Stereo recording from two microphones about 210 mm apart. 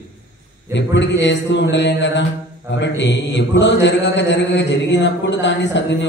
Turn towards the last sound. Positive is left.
turn(degrees=55)  # may be behind; listen again after turning